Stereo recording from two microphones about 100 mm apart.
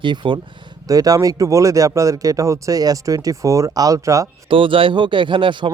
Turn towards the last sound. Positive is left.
turn(degrees=-55)  # may be behind; listen again after turning